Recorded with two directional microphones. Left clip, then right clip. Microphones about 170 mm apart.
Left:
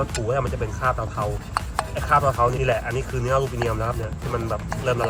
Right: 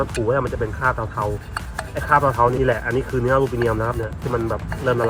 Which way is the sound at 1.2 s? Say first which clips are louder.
Right 1 dB; centre (ahead or behind).